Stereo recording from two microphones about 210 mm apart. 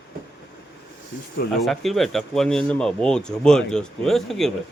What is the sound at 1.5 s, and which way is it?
Speech, centre (ahead or behind).